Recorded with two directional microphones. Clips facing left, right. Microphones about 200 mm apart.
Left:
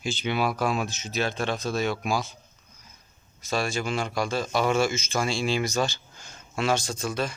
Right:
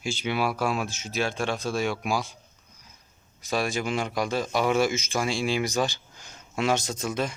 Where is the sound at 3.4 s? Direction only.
15° right (ahead or behind).